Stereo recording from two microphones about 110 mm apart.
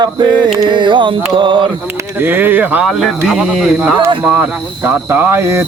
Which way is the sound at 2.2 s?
20° right (ahead or behind).